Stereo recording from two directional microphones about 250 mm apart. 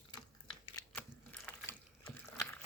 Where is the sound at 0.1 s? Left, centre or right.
Centre.